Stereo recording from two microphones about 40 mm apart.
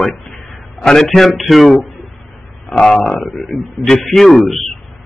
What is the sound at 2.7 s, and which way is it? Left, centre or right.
A man's voice, centre.